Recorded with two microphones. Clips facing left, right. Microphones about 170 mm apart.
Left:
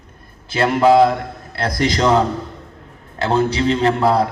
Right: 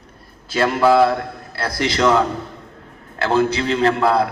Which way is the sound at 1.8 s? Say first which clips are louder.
Left 1 dB; 40° left (ahead or behind).